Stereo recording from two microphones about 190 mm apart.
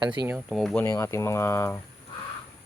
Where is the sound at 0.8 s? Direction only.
15° left (ahead or behind).